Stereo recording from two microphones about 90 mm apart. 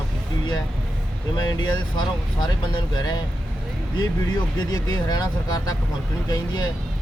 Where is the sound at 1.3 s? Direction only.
55° left (ahead or behind).